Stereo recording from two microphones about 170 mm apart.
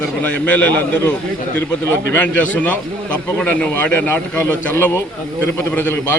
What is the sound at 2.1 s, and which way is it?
Speech, 10° left (ahead or behind).